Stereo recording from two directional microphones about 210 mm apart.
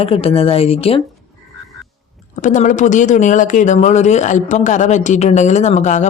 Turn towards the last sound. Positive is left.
turn(degrees=35)  # may be behind; listen again after turning